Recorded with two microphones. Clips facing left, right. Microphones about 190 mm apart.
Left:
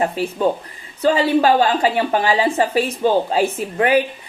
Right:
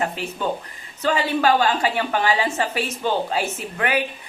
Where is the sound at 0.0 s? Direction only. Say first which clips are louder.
Left 7 dB; 35° left (ahead or behind).